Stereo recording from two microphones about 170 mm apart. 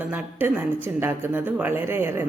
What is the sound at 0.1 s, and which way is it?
A woman's voice, 10° right (ahead or behind).